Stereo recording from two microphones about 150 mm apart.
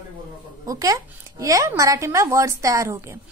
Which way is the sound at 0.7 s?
25° right (ahead or behind).